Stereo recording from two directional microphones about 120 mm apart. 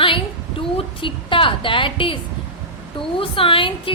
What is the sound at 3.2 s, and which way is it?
Speech, 50° left (ahead or behind).